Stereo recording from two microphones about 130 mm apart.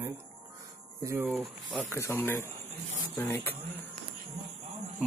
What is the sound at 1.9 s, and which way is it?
Speech, 20° left (ahead or behind).